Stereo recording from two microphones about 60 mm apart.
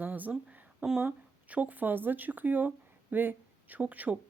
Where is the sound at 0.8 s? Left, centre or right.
Centre.